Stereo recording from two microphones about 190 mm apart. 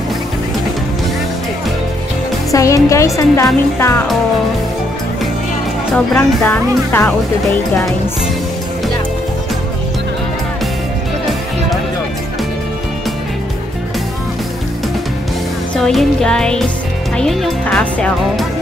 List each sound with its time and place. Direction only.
2.5 s a woman's voice: 15° left (ahead or behind)
5.9 s a woman's voice: 10° left (ahead or behind)
15.7 s speech: centre (ahead or behind)